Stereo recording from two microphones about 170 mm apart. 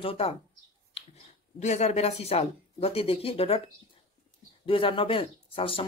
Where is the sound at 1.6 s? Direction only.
40° left (ahead or behind).